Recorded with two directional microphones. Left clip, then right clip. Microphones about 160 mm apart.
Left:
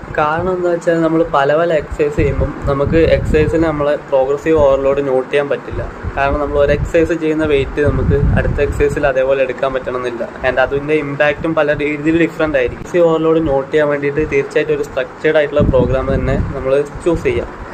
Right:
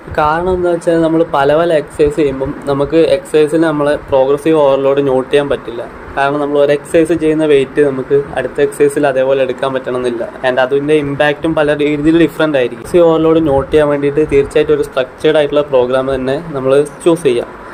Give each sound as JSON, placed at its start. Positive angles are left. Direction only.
{"t": 0.2, "sound": "speech", "side_deg": -45}